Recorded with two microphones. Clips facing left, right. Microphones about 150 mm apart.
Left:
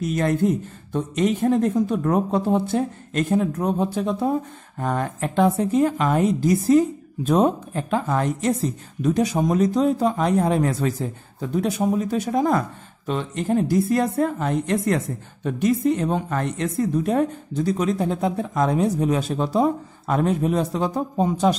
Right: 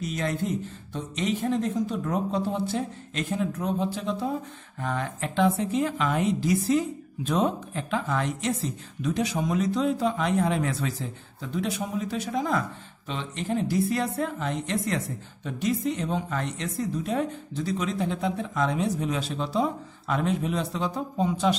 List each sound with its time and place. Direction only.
0.0 s speech: 50° left (ahead or behind)